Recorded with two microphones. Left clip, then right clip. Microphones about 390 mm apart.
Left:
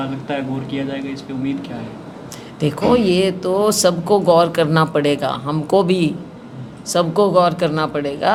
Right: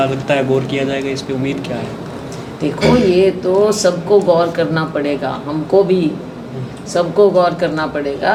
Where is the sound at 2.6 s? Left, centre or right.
Left.